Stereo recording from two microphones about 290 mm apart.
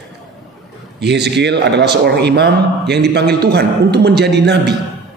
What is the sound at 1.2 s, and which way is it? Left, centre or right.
A man's voice, right.